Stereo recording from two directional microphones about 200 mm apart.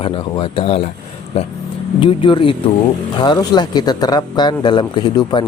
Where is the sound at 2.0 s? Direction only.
25° left (ahead or behind).